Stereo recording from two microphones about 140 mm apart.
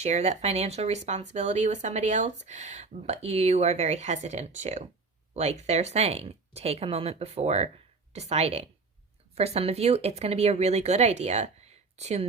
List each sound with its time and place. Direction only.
0.0 s speech: 50° right (ahead or behind)